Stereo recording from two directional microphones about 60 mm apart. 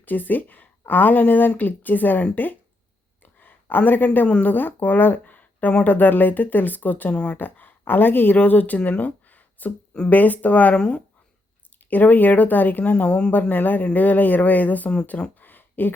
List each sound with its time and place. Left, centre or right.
0.0 s speech: left
3.2 s a sound: left
4.3 s speech: left
7.1 s speech: centre
7.3 s speech: left
10.8 s speech: centre
11.9 s speech: left
13.5 s speech: left
15.4 s a sound: left